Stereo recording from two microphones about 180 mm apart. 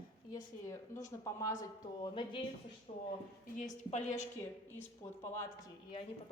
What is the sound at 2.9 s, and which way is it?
A woman's voice, 40° left (ahead or behind).